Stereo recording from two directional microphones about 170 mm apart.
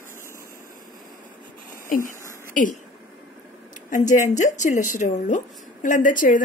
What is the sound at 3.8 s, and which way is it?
Speech, 50° left (ahead or behind).